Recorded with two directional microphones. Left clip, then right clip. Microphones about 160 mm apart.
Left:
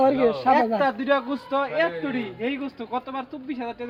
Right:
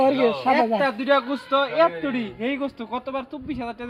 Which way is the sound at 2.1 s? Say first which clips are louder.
Right 2 dB; 75° right (ahead or behind).